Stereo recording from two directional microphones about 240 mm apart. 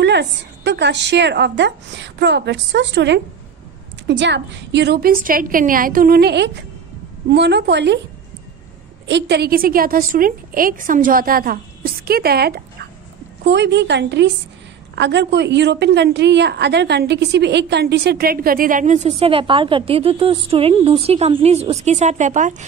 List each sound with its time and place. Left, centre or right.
0.0 s a woman's voice: right
9.0 s a woman's voice: right